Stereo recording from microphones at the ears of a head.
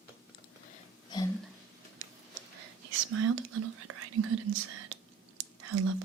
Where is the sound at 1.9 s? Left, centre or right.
Right.